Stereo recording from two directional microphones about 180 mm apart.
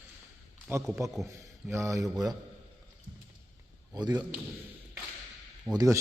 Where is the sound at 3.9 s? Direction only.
20° right (ahead or behind).